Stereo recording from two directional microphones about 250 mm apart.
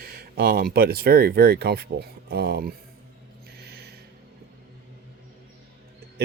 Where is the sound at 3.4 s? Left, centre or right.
Right.